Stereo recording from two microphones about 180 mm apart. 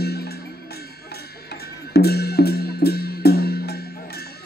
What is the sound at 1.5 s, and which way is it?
Music, 65° left (ahead or behind).